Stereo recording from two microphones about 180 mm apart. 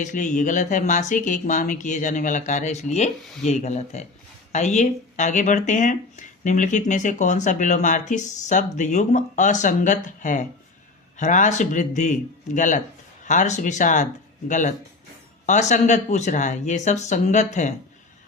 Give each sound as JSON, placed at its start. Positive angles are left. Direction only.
{"t": 0.0, "sound": "speech", "side_deg": 45}